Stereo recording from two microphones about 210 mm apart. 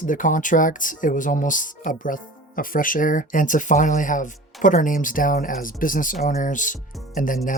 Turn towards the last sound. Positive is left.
turn(degrees=40)  # may be behind; listen again after turning